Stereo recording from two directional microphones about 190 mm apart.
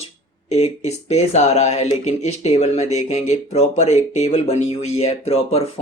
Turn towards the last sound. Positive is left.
turn(degrees=30)  # may be behind; listen again after turning